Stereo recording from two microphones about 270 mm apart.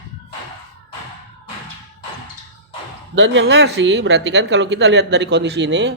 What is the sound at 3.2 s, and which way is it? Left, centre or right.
A man's voice, right.